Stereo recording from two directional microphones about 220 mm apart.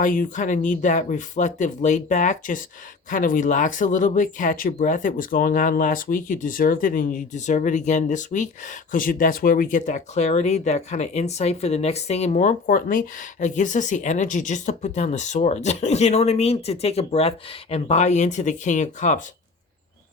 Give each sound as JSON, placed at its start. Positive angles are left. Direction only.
{"t": 0.0, "sound": "speech", "side_deg": 35}